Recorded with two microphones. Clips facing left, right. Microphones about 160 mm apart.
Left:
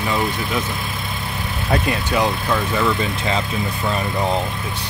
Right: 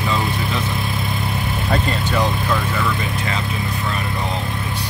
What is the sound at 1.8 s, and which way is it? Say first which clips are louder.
Speech: left 1 dB; 10° left (ahead or behind).